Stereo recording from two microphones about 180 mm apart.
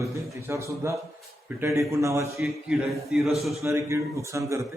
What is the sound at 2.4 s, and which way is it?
A man's voice, centre (ahead or behind).